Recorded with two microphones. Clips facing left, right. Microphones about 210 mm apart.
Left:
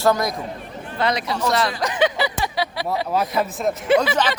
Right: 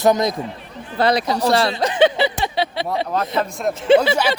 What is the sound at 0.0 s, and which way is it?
Speech, 20° right (ahead or behind).